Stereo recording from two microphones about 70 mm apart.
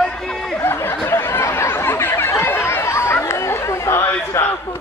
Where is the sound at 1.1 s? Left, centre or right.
Left.